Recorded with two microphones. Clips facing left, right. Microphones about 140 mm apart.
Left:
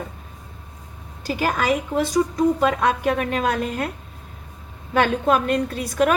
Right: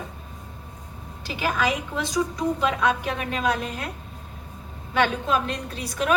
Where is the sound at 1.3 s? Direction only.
45° left (ahead or behind).